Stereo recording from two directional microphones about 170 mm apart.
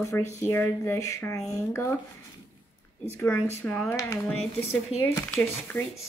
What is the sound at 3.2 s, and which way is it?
A woman's voice, 10° left (ahead or behind).